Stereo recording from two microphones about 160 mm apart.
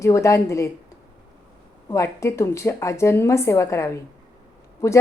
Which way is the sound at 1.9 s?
20° left (ahead or behind).